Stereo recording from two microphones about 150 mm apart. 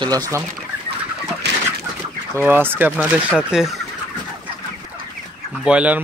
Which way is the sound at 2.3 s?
15° right (ahead or behind).